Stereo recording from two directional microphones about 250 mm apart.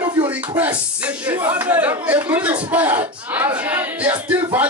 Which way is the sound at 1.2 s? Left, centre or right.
Centre.